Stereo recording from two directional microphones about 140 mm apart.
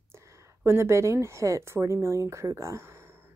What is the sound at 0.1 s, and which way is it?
A woman's voice, 20° right (ahead or behind).